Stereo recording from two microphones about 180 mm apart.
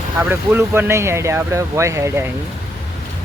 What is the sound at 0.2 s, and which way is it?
Speech, 10° right (ahead or behind).